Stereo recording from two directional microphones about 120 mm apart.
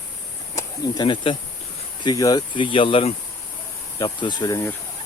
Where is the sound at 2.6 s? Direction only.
45° left (ahead or behind).